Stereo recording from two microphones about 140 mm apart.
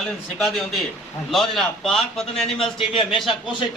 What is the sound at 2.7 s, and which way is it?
Speech, 40° left (ahead or behind).